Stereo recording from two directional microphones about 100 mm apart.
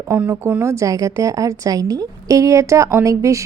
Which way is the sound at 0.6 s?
30° right (ahead or behind).